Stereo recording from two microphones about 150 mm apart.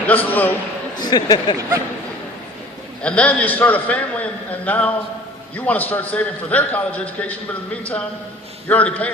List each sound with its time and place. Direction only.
0.1 s a man's voice: 10° left (ahead or behind)
0.9 s speech: 25° left (ahead or behind)
3.0 s a man's voice: 10° left (ahead or behind)
8.6 s a man's voice: 10° left (ahead or behind)